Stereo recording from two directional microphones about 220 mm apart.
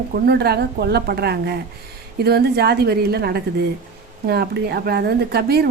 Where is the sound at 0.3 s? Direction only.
45° right (ahead or behind).